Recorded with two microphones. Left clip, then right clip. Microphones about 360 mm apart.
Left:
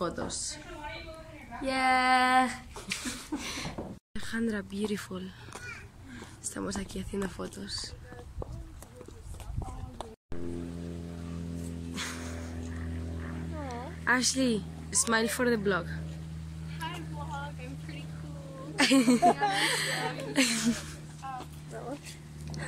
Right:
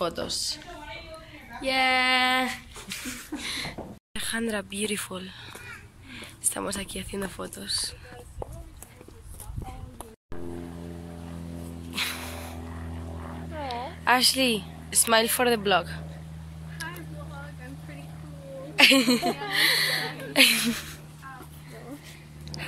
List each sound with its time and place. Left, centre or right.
0.0 s speech: centre
1.6 s speech: centre
11.9 s music: centre
13.6 s a sound: right
14.0 s speech: centre
18.8 s speech: centre
19.5 s a sound: centre